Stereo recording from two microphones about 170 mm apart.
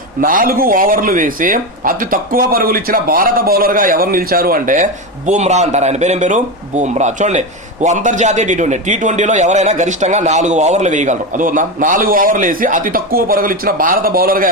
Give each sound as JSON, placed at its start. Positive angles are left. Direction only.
{"t": 0.2, "sound": "speech", "side_deg": -55}